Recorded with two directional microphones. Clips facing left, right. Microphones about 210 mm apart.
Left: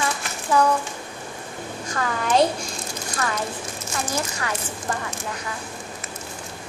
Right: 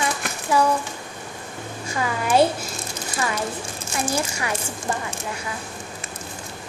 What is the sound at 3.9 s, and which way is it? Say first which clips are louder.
Speech: right 3 dB; 10° right (ahead or behind).